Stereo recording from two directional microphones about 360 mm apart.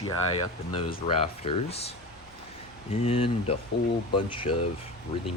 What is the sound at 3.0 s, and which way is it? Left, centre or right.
Speech, centre.